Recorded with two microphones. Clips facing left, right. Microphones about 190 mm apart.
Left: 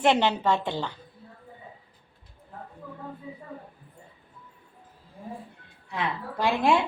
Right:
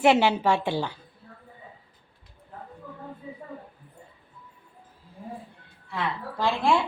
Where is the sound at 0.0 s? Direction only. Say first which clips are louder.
Right 2 dB; 10° right (ahead or behind).